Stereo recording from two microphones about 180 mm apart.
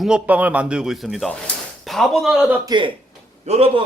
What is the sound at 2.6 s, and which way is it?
A man's voice, 25° right (ahead or behind).